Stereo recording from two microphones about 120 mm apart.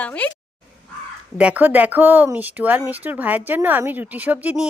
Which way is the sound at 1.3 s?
10° right (ahead or behind).